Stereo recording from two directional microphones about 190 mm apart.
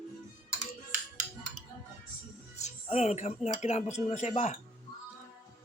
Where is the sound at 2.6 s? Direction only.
35° left (ahead or behind).